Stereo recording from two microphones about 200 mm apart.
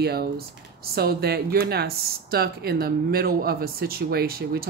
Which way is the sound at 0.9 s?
50° right (ahead or behind).